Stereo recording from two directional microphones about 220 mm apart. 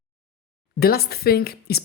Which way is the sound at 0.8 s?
45° left (ahead or behind).